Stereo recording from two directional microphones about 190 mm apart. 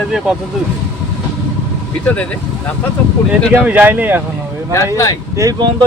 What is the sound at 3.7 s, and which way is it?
Speech, 10° right (ahead or behind).